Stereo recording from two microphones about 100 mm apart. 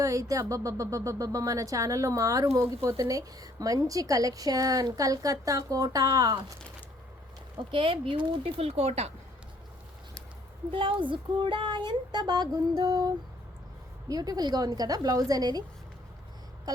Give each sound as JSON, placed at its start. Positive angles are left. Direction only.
{"t": 0.0, "sound": "a woman's voice", "side_deg": -35}
{"t": 7.7, "sound": "speech", "side_deg": -60}
{"t": 10.7, "sound": "a woman's voice", "side_deg": -60}